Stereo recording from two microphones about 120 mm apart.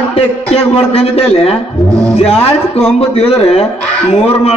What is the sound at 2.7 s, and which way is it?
Speech, 55° left (ahead or behind).